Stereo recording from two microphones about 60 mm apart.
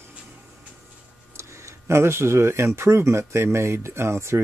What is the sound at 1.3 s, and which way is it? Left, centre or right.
Speech, right.